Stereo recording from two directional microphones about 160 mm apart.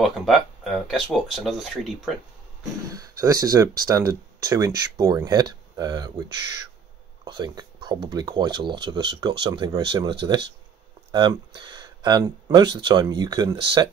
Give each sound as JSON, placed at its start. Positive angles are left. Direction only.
{"t": 0.0, "sound": "speech", "side_deg": 0}
{"t": 2.9, "sound": "speech", "side_deg": -20}